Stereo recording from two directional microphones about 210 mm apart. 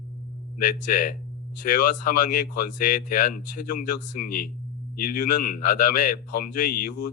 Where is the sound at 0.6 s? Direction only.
40° left (ahead or behind).